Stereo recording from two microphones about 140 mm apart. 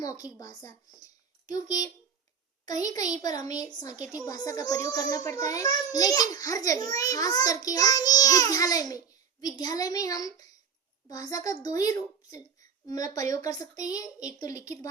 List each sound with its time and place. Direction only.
0.0 s a child's voice: 25° left (ahead or behind)